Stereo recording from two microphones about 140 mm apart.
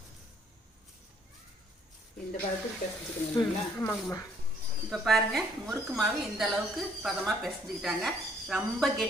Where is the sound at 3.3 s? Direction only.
20° left (ahead or behind).